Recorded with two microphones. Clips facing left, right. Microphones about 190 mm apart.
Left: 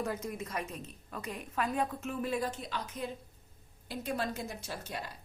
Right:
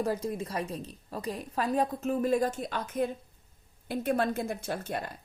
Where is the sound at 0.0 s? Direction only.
30° right (ahead or behind).